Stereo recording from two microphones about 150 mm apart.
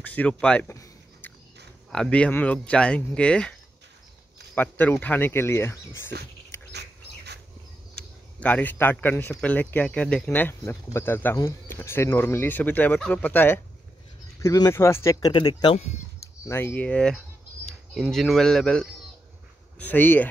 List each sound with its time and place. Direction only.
0.0 s speech: 10° left (ahead or behind)
0.7 s a sound: 20° left (ahead or behind)
1.9 s speech: 5° left (ahead or behind)
4.6 s speech: 15° left (ahead or behind)
6.7 s bird: 90° right
7.9 s speech: 10° left (ahead or behind); by 15.8 s 35° left (ahead or behind)
16.4 s speech: 15° left (ahead or behind)